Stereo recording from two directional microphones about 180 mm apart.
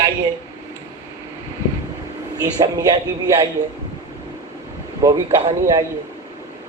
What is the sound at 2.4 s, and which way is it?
Speech, 20° right (ahead or behind).